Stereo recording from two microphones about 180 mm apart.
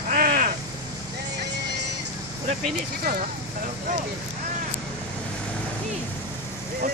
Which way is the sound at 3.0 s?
60° right (ahead or behind).